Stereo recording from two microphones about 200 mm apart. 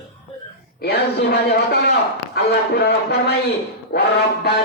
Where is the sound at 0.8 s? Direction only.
50° left (ahead or behind).